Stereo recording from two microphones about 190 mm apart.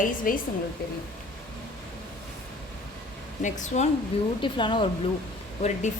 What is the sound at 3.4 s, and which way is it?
Speech, 40° left (ahead or behind).